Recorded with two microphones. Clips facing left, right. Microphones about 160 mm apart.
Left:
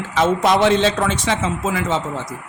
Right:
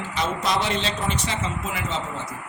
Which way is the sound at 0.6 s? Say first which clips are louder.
Left 10 dB; 90° left.